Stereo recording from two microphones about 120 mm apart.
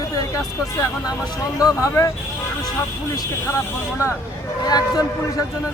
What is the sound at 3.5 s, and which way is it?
A man's voice, 25° left (ahead or behind).